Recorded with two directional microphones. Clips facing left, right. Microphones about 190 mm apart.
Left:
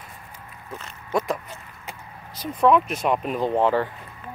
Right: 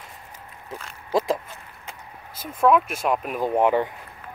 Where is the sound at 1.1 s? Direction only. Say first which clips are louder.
Right 2 dB; 30° right (ahead or behind).